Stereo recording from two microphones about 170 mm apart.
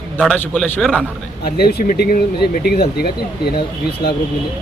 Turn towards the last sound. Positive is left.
turn(degrees=75)  # may be behind; listen again after turning